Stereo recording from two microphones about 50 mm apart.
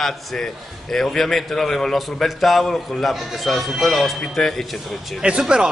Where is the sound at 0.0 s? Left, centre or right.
Centre.